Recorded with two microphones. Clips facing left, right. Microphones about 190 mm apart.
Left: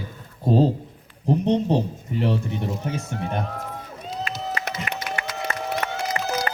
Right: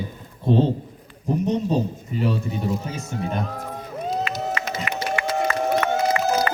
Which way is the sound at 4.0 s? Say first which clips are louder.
Right 5 dB; 45° right (ahead or behind).